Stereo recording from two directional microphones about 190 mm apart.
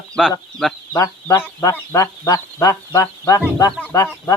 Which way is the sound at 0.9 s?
15° left (ahead or behind).